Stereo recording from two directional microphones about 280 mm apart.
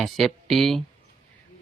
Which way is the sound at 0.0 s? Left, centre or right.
Centre.